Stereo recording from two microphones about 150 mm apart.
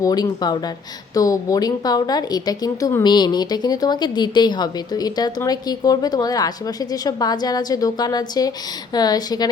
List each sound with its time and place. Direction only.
0.0 s speech: 25° left (ahead or behind)